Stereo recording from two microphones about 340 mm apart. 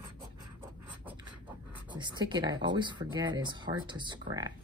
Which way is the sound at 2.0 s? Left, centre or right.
Centre.